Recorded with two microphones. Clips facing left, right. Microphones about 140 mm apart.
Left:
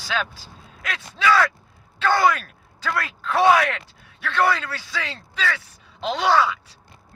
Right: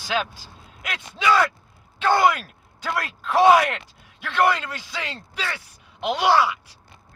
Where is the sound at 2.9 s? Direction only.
15° right (ahead or behind).